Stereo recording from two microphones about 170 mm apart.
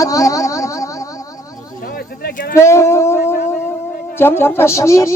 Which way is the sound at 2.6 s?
15° left (ahead or behind).